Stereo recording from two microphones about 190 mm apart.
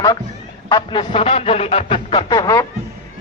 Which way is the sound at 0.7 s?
25° left (ahead or behind).